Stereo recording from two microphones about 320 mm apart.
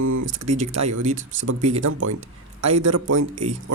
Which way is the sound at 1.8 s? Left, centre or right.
Right.